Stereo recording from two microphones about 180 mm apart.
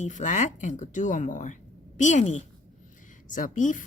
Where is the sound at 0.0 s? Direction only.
40° left (ahead or behind).